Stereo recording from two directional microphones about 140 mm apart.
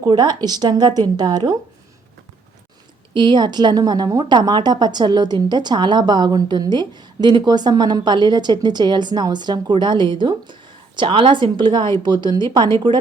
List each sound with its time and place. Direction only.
0.1 s speech: 30° right (ahead or behind)
3.2 s a woman's voice: 30° right (ahead or behind)